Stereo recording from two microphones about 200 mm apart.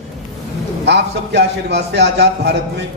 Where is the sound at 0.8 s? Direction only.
60° right (ahead or behind).